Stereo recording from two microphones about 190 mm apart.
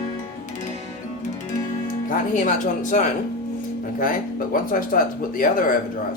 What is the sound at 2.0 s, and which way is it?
Speech, 40° left (ahead or behind).